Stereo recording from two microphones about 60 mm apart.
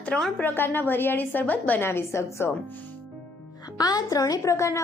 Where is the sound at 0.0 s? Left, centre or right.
Left.